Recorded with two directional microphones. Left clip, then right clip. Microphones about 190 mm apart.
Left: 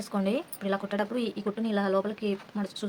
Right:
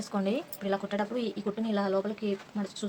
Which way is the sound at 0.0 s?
20° left (ahead or behind).